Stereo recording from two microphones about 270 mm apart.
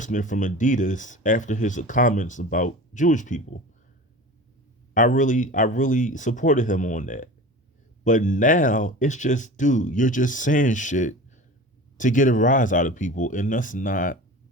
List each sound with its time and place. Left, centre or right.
0.0 s speech: left
4.9 s speech: left